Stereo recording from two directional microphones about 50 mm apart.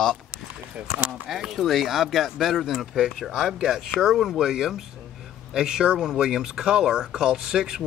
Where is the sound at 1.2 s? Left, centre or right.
Centre.